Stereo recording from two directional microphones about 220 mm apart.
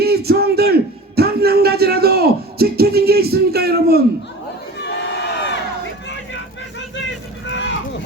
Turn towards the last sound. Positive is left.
turn(degrees=55)  # may be behind; listen again after turning